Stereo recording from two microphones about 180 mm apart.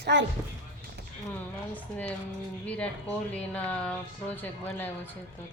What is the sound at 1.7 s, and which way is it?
Speech, 10° left (ahead or behind).